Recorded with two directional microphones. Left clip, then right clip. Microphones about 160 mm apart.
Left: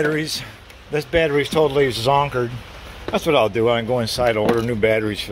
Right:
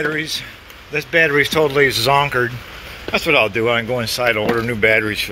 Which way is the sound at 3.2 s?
25° left (ahead or behind).